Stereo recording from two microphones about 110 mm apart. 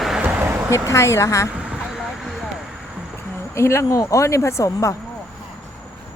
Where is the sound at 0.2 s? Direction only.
15° right (ahead or behind).